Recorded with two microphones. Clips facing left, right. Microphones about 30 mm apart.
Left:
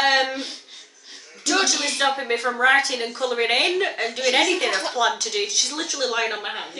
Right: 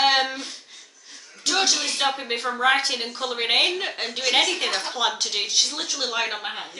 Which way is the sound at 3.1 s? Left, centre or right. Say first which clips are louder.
Left 4 dB; centre.